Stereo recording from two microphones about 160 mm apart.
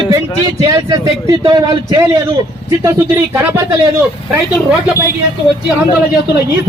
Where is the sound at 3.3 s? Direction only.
15° right (ahead or behind).